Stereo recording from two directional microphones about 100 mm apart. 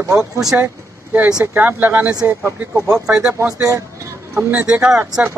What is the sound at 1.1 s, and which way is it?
Speech, 10° right (ahead or behind).